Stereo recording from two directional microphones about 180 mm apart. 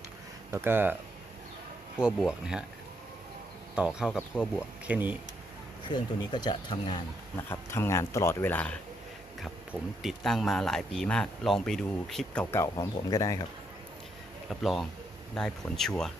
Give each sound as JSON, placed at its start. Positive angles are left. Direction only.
{"t": 0.5, "sound": "speech", "side_deg": -10}
{"t": 2.0, "sound": "speech", "side_deg": -5}
{"t": 3.8, "sound": "speech", "side_deg": -5}
{"t": 5.9, "sound": "speech", "side_deg": 25}
{"t": 7.5, "sound": "speech", "side_deg": 15}
{"t": 10.0, "sound": "speech", "side_deg": 0}
{"t": 14.5, "sound": "speech", "side_deg": 0}